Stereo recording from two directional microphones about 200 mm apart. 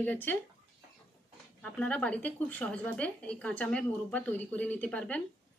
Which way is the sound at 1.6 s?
5° left (ahead or behind).